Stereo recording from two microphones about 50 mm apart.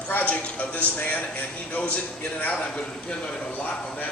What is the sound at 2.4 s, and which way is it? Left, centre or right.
Speech, left.